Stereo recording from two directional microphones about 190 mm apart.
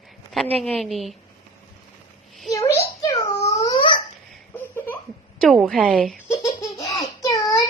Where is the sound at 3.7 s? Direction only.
25° left (ahead or behind).